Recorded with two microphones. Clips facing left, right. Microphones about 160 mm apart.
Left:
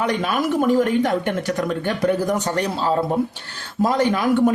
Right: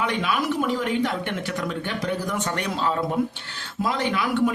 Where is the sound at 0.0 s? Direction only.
40° left (ahead or behind).